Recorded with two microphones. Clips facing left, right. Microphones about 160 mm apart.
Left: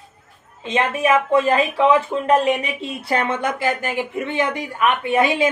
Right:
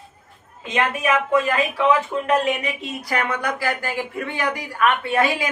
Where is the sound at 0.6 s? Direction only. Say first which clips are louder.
Left 3 dB; 25° left (ahead or behind).